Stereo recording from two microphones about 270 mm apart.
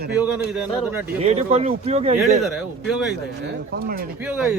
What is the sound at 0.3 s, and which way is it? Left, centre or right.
Speech, centre.